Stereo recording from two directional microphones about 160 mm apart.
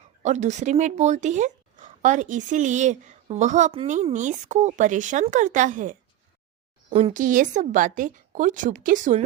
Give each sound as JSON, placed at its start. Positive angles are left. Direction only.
{"t": 0.2, "sound": "a woman's voice", "side_deg": -45}
{"t": 7.1, "sound": "a woman's voice", "side_deg": -55}